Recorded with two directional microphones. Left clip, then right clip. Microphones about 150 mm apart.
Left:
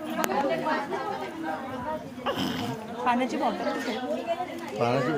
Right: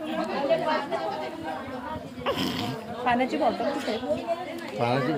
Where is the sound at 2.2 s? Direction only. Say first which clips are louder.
Right 2 dB; 20° right (ahead or behind).